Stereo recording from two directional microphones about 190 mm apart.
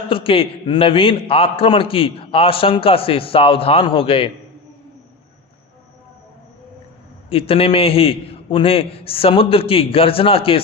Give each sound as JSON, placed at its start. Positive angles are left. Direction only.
{"t": 0.1, "sound": "a man's voice", "side_deg": 30}
{"t": 7.3, "sound": "a man's voice", "side_deg": 30}